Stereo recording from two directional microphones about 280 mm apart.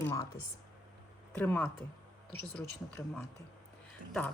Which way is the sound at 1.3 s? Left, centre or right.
Centre.